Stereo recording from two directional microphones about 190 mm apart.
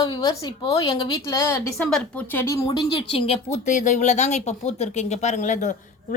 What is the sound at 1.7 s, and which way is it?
Speech, 5° left (ahead or behind).